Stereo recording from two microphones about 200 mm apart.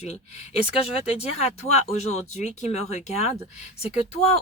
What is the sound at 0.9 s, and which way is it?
Speech, 30° left (ahead or behind).